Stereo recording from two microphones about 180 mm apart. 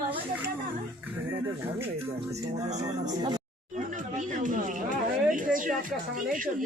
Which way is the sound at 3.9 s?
45° right (ahead or behind).